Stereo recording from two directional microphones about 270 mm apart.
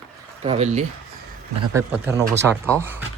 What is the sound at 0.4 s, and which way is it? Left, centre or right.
Speech, right.